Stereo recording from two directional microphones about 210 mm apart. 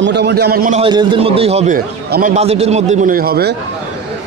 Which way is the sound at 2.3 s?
30° right (ahead or behind).